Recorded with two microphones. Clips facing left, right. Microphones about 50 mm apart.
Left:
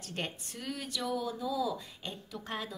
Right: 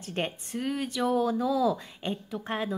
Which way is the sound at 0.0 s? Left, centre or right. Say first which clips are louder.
Right 6 dB; right.